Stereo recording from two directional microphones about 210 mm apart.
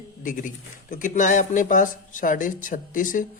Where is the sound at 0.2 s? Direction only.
40° left (ahead or behind).